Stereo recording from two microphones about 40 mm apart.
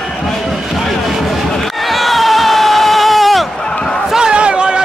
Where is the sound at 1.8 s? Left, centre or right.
Centre.